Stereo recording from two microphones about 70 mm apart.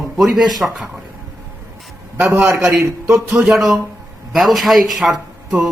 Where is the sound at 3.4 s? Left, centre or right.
Centre.